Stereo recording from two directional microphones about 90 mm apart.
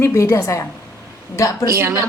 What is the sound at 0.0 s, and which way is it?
Speech, 35° left (ahead or behind).